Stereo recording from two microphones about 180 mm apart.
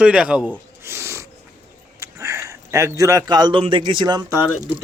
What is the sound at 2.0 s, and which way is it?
A man's voice, 15° right (ahead or behind).